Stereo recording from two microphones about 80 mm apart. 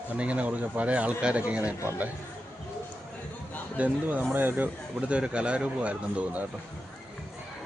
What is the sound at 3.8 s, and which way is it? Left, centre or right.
Speech, right.